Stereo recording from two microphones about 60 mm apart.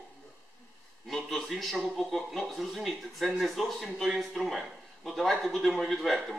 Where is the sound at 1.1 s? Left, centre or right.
Centre.